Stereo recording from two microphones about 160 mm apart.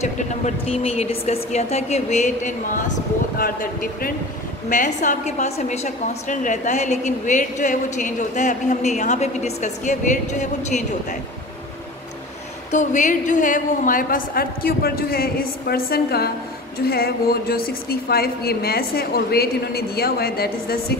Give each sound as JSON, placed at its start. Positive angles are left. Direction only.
{"t": 0.0, "sound": "a woman's voice", "side_deg": 40}
{"t": 4.6, "sound": "a woman's voice", "side_deg": 50}
{"t": 12.7, "sound": "a woman's voice", "side_deg": 50}